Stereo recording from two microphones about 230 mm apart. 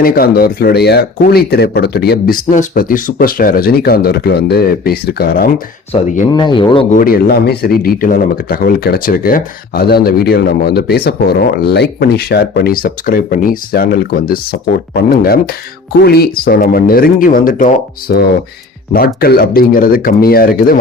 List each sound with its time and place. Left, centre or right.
0.0 s speech: left
6.3 s speech: centre
6.9 s speech: left